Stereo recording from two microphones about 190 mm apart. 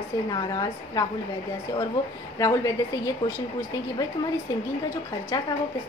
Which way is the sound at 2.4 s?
15° left (ahead or behind).